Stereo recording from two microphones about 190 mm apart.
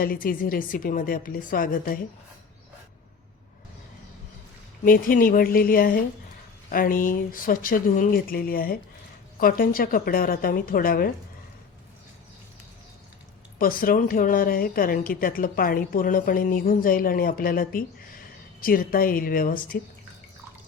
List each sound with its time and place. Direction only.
0.0 s a woman's voice: 50° left (ahead or behind)
4.9 s a woman's voice: 50° left (ahead or behind)
13.6 s a woman's voice: 50° left (ahead or behind)